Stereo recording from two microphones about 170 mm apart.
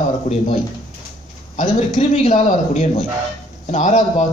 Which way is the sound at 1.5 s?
40° left (ahead or behind).